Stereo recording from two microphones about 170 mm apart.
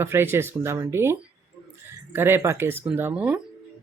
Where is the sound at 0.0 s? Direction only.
15° right (ahead or behind).